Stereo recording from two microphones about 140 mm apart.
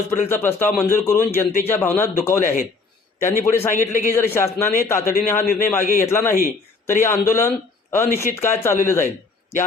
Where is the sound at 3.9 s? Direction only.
75° left (ahead or behind).